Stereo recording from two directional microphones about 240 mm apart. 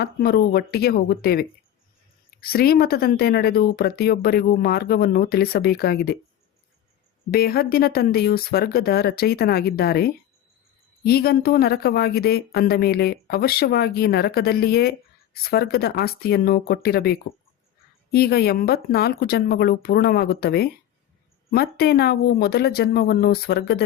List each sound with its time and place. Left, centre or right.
0.0 s speech: left
7.3 s speech: left